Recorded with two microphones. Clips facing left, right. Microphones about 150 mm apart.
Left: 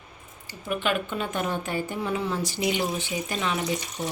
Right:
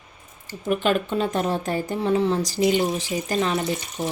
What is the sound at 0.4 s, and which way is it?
A woman's voice, 40° right (ahead or behind).